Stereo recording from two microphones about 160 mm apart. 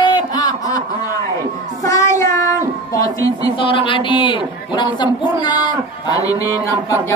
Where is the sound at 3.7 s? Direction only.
30° left (ahead or behind).